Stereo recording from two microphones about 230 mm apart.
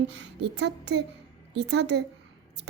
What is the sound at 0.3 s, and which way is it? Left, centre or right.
A woman's voice, right.